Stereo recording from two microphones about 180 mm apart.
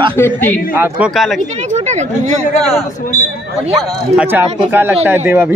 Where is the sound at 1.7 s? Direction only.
40° right (ahead or behind).